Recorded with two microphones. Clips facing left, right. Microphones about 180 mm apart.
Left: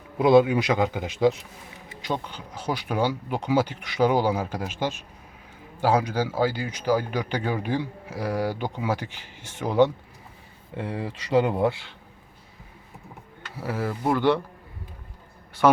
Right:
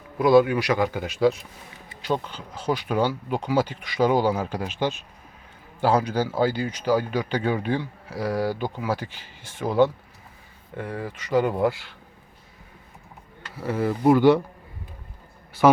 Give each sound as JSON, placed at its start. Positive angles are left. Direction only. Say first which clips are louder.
{"t": 0.2, "sound": "a man's voice", "louder": "even", "side_deg": 20}
{"t": 9.6, "sound": "speech", "louder": "right 1 dB", "side_deg": 5}
{"t": 10.8, "sound": "a man's voice", "louder": "left 1 dB", "side_deg": 25}
{"t": 13.6, "sound": "a man's voice", "louder": "right 4 dB", "side_deg": 5}
{"t": 15.6, "sound": "a man's voice", "louder": "right 2 dB", "side_deg": -5}